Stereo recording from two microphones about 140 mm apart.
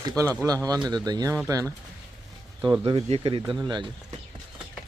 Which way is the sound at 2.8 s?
40° right (ahead or behind).